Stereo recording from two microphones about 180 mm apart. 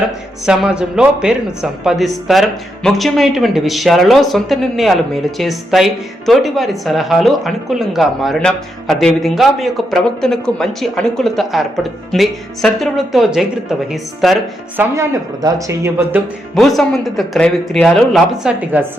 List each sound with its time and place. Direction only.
0.4 s speech: 5° right (ahead or behind)
14.8 s speech: 20° right (ahead or behind)
16.6 s speech: centre (ahead or behind)